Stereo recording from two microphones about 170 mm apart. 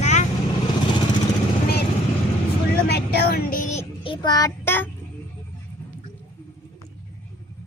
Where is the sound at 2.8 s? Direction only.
75° left (ahead or behind); by 4.9 s 15° left (ahead or behind).